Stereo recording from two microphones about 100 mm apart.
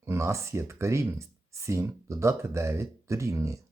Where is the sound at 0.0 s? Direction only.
30° right (ahead or behind).